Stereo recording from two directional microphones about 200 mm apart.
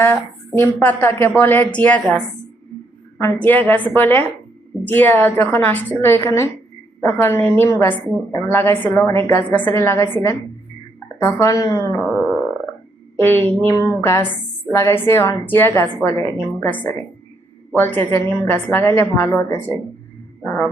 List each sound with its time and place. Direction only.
0.0 s speech: 10° left (ahead or behind)
3.2 s speech: 10° left (ahead or behind)
11.2 s speech: 15° left (ahead or behind)
12.0 s a sound: 10° right (ahead or behind)
13.1 s speech: 10° left (ahead or behind)